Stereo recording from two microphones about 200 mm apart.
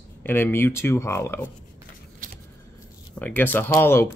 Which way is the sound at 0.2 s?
10° left (ahead or behind).